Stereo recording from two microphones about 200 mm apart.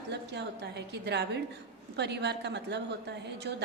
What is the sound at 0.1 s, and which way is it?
A woman's voice, 55° right (ahead or behind).